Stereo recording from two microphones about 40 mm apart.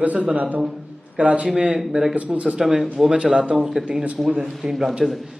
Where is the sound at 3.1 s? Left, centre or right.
Right.